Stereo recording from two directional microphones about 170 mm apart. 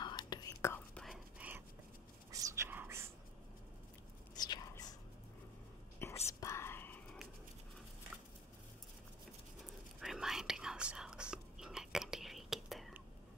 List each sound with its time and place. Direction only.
0.0 s whispering: 25° left (ahead or behind)
1.0 s whispering: 5° right (ahead or behind)
4.4 s whispering: 25° left (ahead or behind)
6.0 s whispering: 15° left (ahead or behind)
9.9 s whispering: centre (ahead or behind)